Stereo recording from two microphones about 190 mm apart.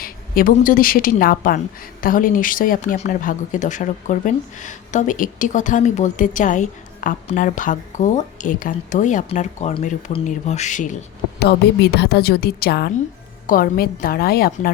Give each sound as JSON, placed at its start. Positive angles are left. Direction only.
{"t": 0.0, "sound": "a woman's voice", "side_deg": 50}
{"t": 11.3, "sound": "a woman's voice", "side_deg": 60}